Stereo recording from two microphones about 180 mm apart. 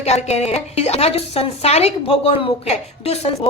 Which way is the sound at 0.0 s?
35° left (ahead or behind).